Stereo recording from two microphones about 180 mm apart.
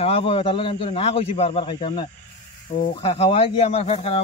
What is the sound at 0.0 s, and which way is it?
Speech, 30° left (ahead or behind).